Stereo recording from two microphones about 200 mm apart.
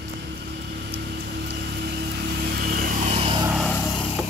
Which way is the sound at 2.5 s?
45° right (ahead or behind).